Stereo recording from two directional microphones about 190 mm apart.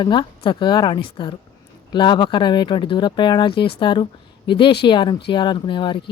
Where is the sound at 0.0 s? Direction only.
25° left (ahead or behind).